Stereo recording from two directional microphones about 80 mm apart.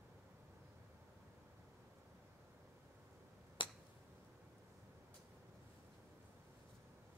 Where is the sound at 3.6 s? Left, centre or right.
Left.